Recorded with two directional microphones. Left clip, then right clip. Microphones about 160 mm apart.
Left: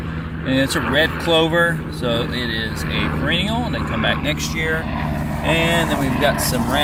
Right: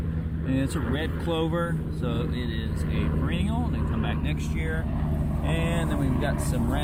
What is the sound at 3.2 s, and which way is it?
Speech, 30° left (ahead or behind).